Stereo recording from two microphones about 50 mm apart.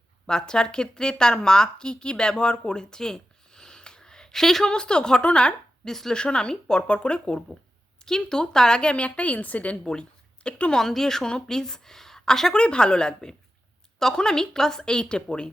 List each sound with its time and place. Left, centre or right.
0.3 s speech: centre
5.9 s a woman's voice: centre
6.1 s a woman's voice: centre
9.8 s speech: centre
10.8 s a woman's voice: centre
12.5 s a woman's voice: centre